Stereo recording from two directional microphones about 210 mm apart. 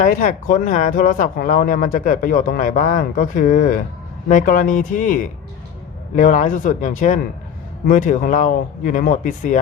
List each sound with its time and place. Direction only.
0.0 s speech: 35° left (ahead or behind)